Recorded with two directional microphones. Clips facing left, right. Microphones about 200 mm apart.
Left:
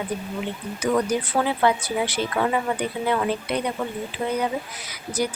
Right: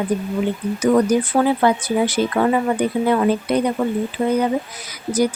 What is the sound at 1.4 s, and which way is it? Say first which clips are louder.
Speech: right 5 dB; 45° right (ahead or behind).